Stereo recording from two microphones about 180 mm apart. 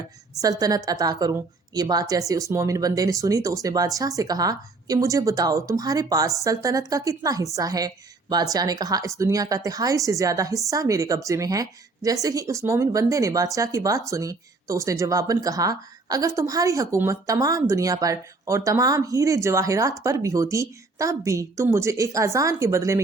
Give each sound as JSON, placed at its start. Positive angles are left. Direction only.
{"t": 0.4, "sound": "a woman's voice", "side_deg": -20}